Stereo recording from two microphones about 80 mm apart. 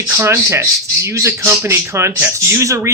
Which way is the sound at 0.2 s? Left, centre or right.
Right.